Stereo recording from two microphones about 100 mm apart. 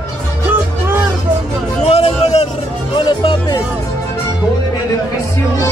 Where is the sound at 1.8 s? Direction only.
85° left.